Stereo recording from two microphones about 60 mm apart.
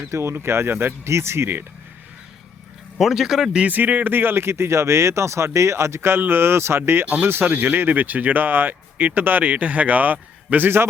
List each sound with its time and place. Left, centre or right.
0.0 s speech: right
1.0 s speech: right
3.0 s speech: centre
3.7 s speech: right
7.0 s speech: right